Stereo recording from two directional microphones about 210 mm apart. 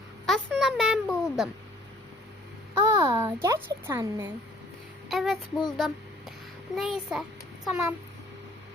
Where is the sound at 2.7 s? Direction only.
15° right (ahead or behind).